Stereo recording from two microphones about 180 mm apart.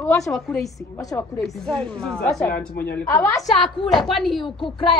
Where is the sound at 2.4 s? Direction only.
55° left (ahead or behind).